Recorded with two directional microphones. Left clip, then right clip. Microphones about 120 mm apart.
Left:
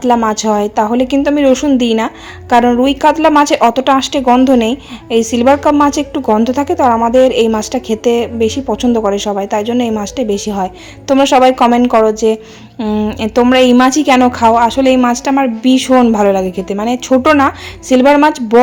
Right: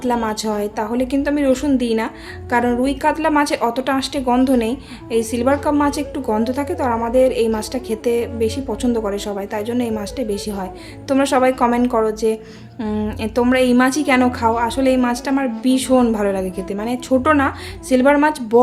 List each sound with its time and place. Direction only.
0.3 s a woman's voice: 40° left (ahead or behind)
12.8 s a woman's voice: 30° left (ahead or behind)
13.1 s a woman's voice: 45° left (ahead or behind)